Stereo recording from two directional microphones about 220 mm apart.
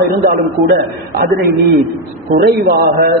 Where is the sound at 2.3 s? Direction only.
45° right (ahead or behind).